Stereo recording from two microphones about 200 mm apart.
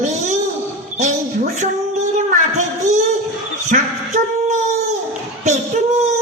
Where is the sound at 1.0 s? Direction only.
35° right (ahead or behind).